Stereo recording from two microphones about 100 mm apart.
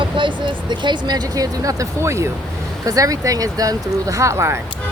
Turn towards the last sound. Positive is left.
turn(degrees=-30)  # may be behind; listen again after turning